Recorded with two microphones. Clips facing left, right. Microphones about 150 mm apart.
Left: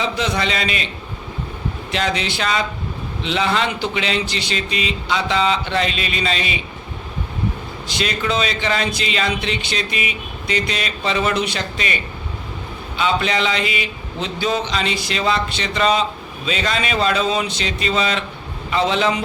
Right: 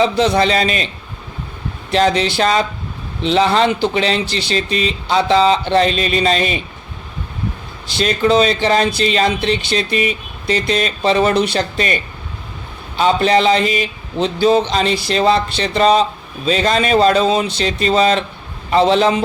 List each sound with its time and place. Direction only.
0.0 s speech: 35° right (ahead or behind)
1.9 s speech: 35° right (ahead or behind)
7.9 s speech: 35° right (ahead or behind)
13.0 s speech: 40° right (ahead or behind)